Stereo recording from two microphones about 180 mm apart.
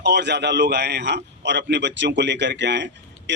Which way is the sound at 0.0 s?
70° right (ahead or behind).